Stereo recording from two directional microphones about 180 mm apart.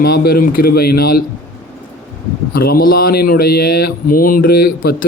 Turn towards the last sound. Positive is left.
turn(degrees=55)  # may be behind; listen again after turning